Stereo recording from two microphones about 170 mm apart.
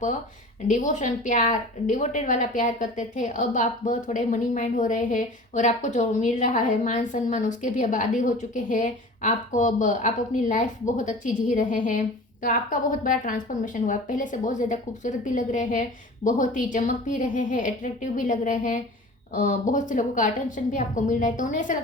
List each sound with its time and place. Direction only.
0.7 s a woman's voice: 45° left (ahead or behind)